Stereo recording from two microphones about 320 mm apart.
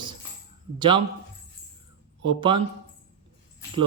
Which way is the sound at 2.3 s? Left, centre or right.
Centre.